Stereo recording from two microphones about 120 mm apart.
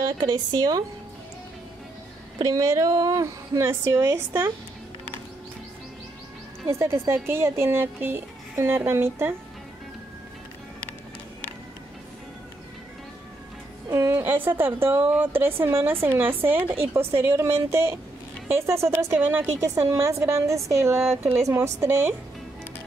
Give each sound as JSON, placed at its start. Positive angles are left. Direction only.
{"t": 0.2, "sound": "speech", "side_deg": -35}
{"t": 2.3, "sound": "a woman's voice", "side_deg": -25}
{"t": 6.7, "sound": "a woman's voice", "side_deg": -20}
{"t": 13.8, "sound": "a woman's voice", "side_deg": -25}